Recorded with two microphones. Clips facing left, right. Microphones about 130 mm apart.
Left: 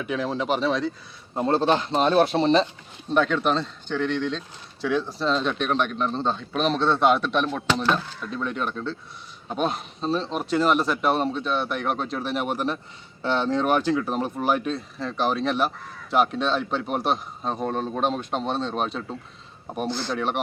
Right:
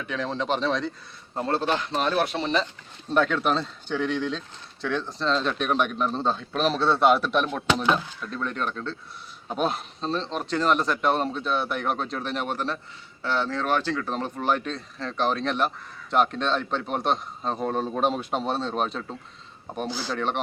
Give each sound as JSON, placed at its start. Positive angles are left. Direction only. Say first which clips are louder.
{"t": 0.0, "sound": "speech", "louder": "left 3 dB", "side_deg": 10}
{"t": 1.4, "sound": "speech", "louder": "left 4 dB", "side_deg": 20}
{"t": 3.1, "sound": "speech", "louder": "left 1 dB", "side_deg": 0}
{"t": 20.1, "sound": "speech", "louder": "even", "side_deg": 5}